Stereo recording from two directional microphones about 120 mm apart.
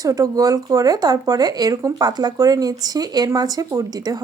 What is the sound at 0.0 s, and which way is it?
A woman's voice, 30° right (ahead or behind).